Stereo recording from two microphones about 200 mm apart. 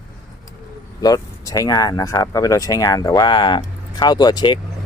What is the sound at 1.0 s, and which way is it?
Speech, 20° left (ahead or behind).